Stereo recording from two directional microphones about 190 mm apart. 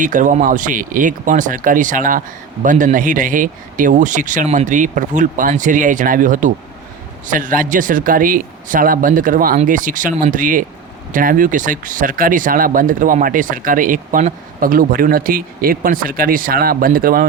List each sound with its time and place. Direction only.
0.0 s speech: 45° right (ahead or behind)